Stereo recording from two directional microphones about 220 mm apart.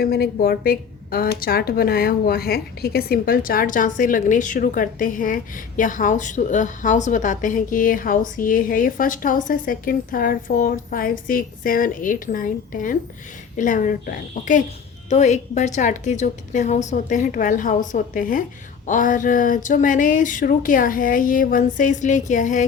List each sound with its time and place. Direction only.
0.0 s a woman's voice: 45° left (ahead or behind)